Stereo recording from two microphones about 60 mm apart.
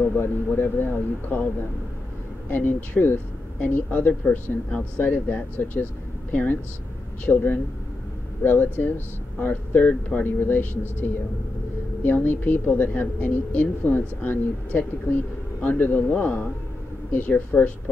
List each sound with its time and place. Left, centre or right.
0.1 s a woman's voice: left
2.4 s a woman's voice: left
4.6 s speech: centre
5.0 s a woman's voice: left